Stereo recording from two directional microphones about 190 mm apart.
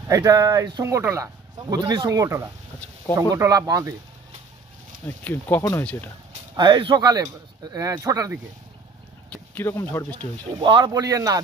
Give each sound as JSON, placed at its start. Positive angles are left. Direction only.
{"t": 0.1, "sound": "speech", "side_deg": -20}
{"t": 5.0, "sound": "speech", "side_deg": 10}
{"t": 6.5, "sound": "speech", "side_deg": -20}
{"t": 9.3, "sound": "speech", "side_deg": 10}
{"t": 10.1, "sound": "speech", "side_deg": -25}